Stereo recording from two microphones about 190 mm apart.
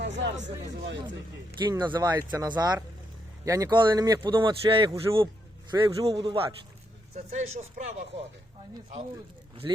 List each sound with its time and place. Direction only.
0.0 s speech: 70° right (ahead or behind)
1.5 s a man's voice: 20° right (ahead or behind); by 7.9 s 35° right (ahead or behind)
9.6 s a man's voice: 25° right (ahead or behind)